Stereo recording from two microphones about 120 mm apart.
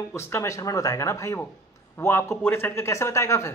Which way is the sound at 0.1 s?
20° left (ahead or behind).